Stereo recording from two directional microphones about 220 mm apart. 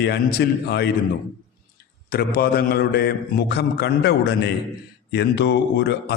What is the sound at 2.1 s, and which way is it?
A man's voice, 45° left (ahead or behind).